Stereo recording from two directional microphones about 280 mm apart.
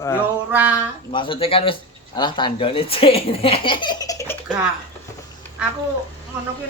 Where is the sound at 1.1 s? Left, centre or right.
Centre.